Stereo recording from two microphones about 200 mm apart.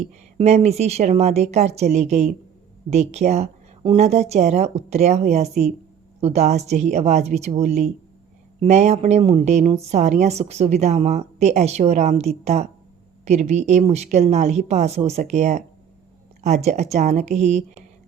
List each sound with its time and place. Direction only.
0.0 s a woman's voice: 35° right (ahead or behind)